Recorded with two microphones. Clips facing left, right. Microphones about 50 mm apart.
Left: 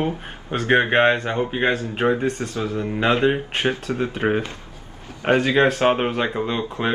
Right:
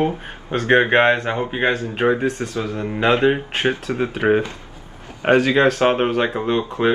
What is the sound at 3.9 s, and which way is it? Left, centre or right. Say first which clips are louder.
Speech: right 2 dB; right.